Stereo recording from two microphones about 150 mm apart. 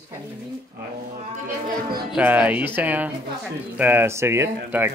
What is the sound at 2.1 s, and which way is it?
Speech, 10° right (ahead or behind).